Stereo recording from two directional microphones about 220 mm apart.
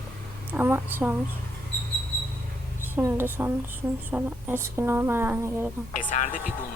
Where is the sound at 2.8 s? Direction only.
10° right (ahead or behind).